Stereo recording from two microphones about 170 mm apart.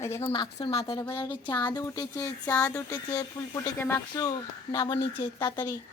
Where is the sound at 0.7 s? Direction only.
35° left (ahead or behind).